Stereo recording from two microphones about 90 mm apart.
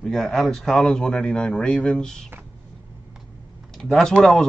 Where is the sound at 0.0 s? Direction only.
5° left (ahead or behind).